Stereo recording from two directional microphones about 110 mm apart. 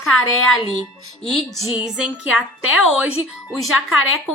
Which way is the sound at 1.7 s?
10° right (ahead or behind).